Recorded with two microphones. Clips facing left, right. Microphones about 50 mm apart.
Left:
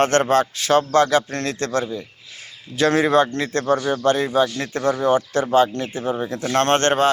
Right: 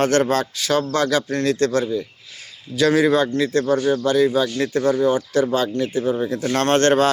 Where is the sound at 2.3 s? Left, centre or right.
Left.